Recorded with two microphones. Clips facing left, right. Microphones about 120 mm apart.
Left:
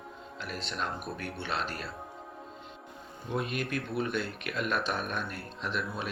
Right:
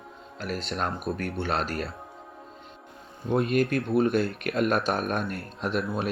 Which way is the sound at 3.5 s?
45° right (ahead or behind).